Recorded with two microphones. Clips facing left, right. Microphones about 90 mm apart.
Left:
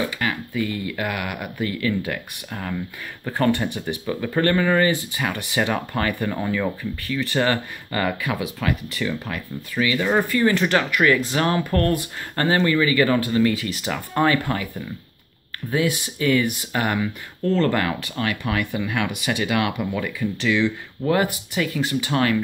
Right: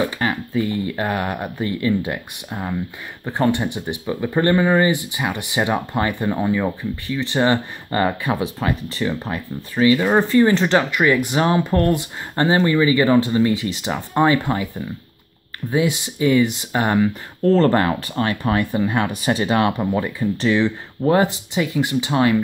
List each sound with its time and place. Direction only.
0.0 s speech: 30° right (ahead or behind)
15.7 s speech: 20° right (ahead or behind)